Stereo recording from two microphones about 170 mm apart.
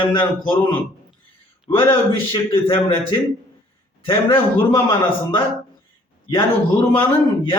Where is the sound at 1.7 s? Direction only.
25° left (ahead or behind).